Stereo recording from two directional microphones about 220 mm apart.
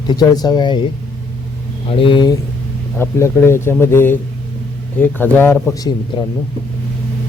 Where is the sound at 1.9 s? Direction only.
25° left (ahead or behind).